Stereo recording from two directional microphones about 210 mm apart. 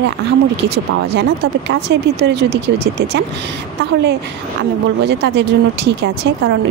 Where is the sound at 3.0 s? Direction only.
55° right (ahead or behind).